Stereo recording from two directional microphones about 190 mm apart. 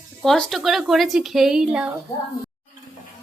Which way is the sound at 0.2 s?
5° left (ahead or behind).